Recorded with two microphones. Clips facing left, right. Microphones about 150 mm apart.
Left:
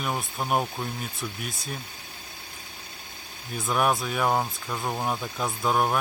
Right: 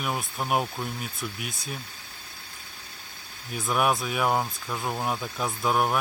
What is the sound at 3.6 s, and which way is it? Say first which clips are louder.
Speech: even; centre (ahead or behind).